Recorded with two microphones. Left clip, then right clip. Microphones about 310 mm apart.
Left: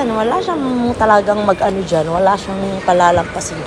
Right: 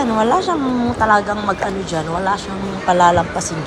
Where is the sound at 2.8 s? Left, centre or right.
Centre.